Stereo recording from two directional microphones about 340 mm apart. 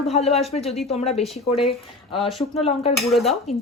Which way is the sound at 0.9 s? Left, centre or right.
Centre.